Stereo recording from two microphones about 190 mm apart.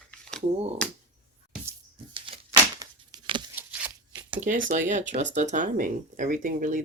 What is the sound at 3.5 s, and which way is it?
Tearing, 5° right (ahead or behind).